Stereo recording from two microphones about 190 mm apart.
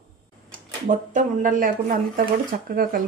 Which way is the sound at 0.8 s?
45° right (ahead or behind).